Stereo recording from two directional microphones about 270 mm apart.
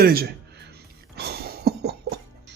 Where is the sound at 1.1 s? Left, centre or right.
Right.